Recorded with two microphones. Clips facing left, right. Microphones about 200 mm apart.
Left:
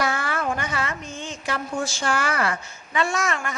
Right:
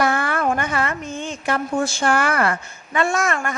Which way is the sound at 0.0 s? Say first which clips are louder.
Right 5 dB; 55° right (ahead or behind).